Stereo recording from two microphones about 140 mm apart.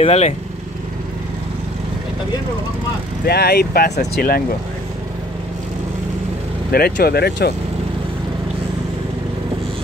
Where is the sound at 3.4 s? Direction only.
90° left.